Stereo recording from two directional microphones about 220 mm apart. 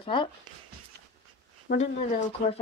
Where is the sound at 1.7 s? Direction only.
30° left (ahead or behind).